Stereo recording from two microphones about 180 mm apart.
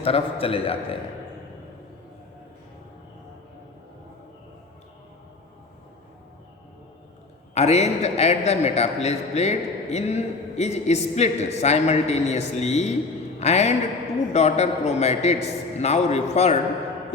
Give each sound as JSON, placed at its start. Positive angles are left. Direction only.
{"t": 0.0, "sound": "a man's voice", "side_deg": 30}
{"t": 7.5, "sound": "a man's voice", "side_deg": 35}